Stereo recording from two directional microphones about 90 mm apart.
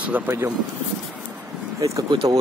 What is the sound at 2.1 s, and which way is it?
Speech, 65° right (ahead or behind).